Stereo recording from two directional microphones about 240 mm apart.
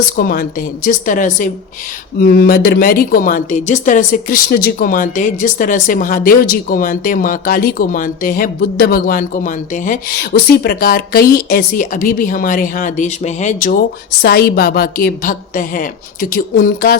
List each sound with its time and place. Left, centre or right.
0.2 s speech: left